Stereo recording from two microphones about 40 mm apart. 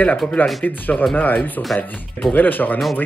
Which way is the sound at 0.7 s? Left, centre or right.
Left.